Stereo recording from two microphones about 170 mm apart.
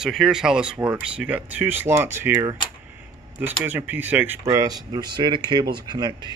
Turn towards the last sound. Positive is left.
turn(degrees=-25)  # may be behind; listen again after turning